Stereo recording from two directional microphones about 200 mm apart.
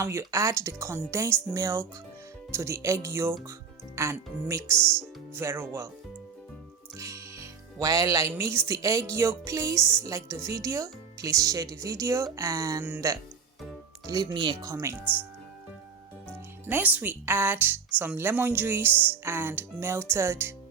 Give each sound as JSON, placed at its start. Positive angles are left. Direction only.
{"t": 0.0, "sound": "speech", "side_deg": -15}
{"t": 7.0, "sound": "speech", "side_deg": -15}
{"t": 16.6, "sound": "speech", "side_deg": -10}